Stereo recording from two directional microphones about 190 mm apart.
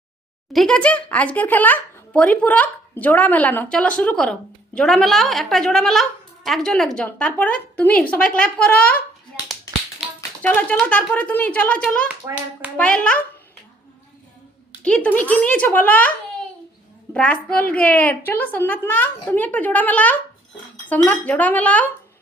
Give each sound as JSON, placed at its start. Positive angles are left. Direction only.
{"t": 0.5, "sound": "a woman's voice", "side_deg": 5}
{"t": 12.2, "sound": "a child's voice", "side_deg": -20}
{"t": 12.7, "sound": "speech", "side_deg": 5}
{"t": 14.8, "sound": "a woman's voice", "side_deg": 5}
{"t": 17.2, "sound": "a woman's voice", "side_deg": 5}